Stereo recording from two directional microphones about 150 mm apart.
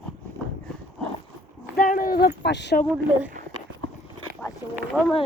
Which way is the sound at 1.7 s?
70° left (ahead or behind).